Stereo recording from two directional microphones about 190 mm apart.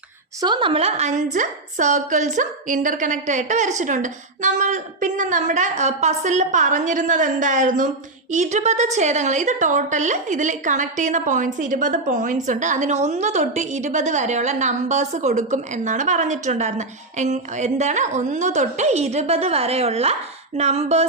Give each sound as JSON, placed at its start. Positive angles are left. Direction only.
{"t": 0.4, "sound": "a woman's voice", "side_deg": -25}